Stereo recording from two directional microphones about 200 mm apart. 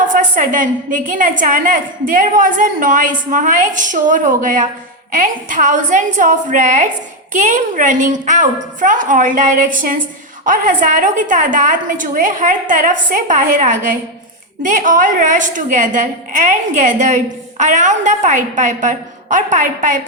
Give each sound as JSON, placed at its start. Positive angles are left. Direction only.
{"t": 0.1, "sound": "a woman's voice", "side_deg": -40}